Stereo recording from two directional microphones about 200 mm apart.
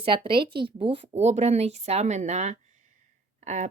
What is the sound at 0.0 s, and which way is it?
A woman's voice, 25° right (ahead or behind).